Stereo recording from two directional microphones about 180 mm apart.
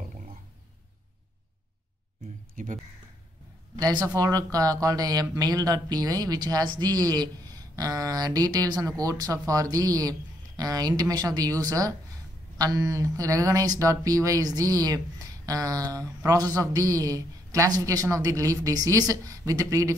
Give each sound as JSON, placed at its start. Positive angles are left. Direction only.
{"t": 2.5, "sound": "speech", "side_deg": -45}
{"t": 3.8, "sound": "speech", "side_deg": -20}